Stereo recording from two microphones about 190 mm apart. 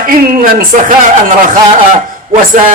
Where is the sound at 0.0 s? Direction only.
50° right (ahead or behind).